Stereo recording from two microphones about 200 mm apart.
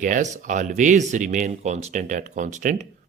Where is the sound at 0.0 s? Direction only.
40° right (ahead or behind).